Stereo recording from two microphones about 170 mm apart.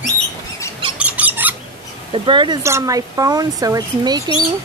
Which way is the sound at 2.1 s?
30° right (ahead or behind).